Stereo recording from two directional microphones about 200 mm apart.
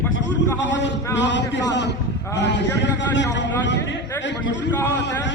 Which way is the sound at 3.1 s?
60° left (ahead or behind).